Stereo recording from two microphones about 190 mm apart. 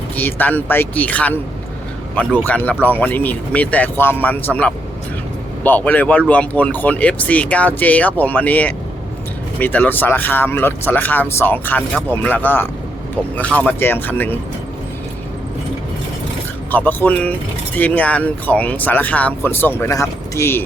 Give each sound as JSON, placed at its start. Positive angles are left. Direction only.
{"t": 0.2, "sound": "speech", "side_deg": 10}
{"t": 16.7, "sound": "speech", "side_deg": 10}